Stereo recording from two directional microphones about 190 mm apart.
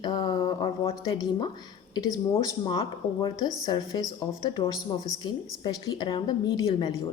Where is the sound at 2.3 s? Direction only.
20° left (ahead or behind).